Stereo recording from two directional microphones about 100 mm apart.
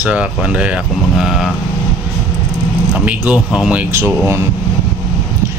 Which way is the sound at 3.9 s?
25° right (ahead or behind).